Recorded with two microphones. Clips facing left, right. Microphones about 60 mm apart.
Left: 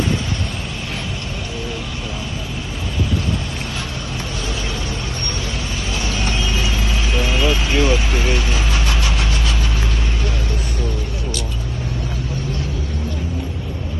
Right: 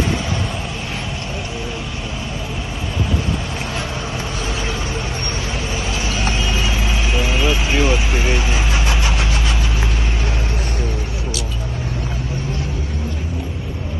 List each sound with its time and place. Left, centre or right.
6.2 s vehicle: centre